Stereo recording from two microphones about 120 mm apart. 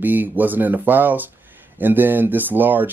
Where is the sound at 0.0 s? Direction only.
15° right (ahead or behind).